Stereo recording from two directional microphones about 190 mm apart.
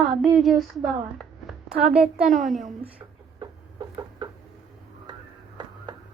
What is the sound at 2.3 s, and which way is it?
Speech, 45° right (ahead or behind).